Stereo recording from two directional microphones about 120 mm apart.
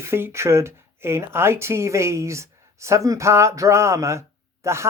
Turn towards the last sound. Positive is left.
turn(degrees=-25)  # may be behind; listen again after turning